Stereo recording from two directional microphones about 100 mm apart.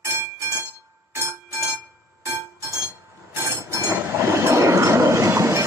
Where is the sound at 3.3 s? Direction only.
25° right (ahead or behind).